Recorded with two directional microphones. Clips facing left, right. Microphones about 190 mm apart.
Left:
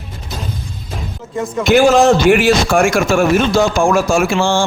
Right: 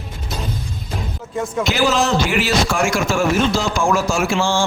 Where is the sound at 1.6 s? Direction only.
50° left (ahead or behind).